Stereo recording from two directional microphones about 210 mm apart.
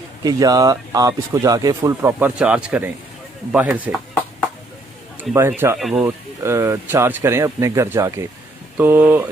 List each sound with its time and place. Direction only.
0.3 s speech: 20° right (ahead or behind)
5.3 s speech: 10° right (ahead or behind)
6.4 s speech: 15° right (ahead or behind)